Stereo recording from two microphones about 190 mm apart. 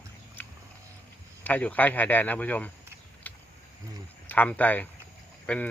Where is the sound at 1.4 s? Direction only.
10° left (ahead or behind).